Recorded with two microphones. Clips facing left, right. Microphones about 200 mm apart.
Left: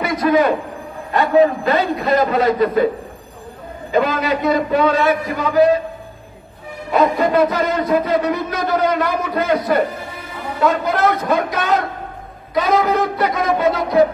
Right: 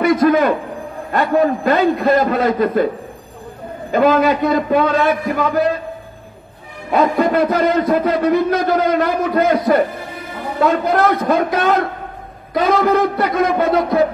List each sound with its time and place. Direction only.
0.0 s a man's voice: 50° right (ahead or behind)
3.9 s a man's voice: 50° right (ahead or behind)
6.9 s a man's voice: 50° right (ahead or behind)